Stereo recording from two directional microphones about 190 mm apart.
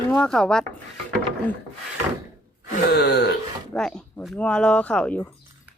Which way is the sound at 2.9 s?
60° left (ahead or behind).